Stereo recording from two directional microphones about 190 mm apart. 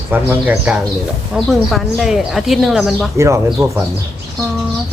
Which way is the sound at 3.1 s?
15° right (ahead or behind).